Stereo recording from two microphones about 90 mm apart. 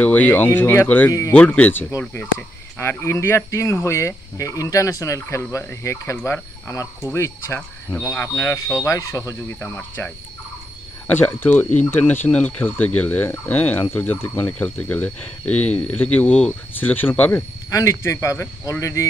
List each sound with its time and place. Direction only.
0.0 s speech: 20° left (ahead or behind); by 9.4 s 35° left (ahead or behind)
9.6 s speech: 20° left (ahead or behind)
17.6 s speech: 35° left (ahead or behind)